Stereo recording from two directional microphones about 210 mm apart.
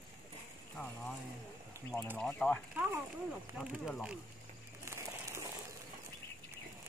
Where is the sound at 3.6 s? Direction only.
5° right (ahead or behind).